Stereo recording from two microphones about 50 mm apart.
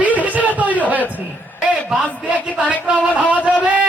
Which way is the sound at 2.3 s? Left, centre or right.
Right.